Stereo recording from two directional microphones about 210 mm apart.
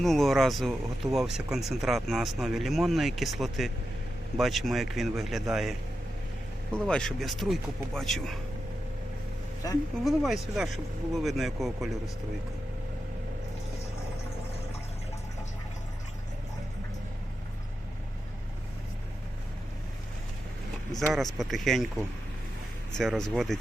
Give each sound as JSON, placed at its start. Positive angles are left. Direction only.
{"t": 0.0, "sound": "speech", "side_deg": 0}
{"t": 6.7, "sound": "speech", "side_deg": 5}
{"t": 9.6, "sound": "speech", "side_deg": 15}
{"t": 10.0, "sound": "speech", "side_deg": 0}
{"t": 21.3, "sound": "speech", "side_deg": 0}